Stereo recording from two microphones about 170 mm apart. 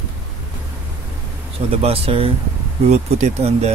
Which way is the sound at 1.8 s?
35° right (ahead or behind).